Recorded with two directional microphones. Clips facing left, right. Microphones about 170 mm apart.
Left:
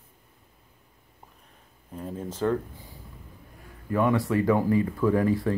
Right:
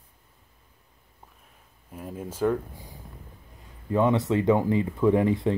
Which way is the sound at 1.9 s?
10° right (ahead or behind).